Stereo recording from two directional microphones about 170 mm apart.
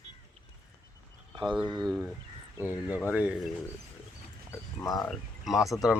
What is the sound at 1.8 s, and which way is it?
Speech, centre (ahead or behind).